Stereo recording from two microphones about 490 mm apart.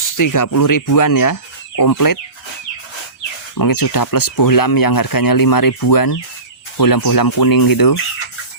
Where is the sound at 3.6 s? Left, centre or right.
Left.